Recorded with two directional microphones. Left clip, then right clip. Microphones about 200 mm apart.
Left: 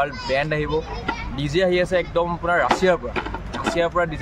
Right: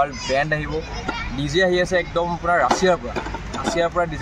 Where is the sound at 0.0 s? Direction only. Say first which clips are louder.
Right 2 dB; 30° left (ahead or behind).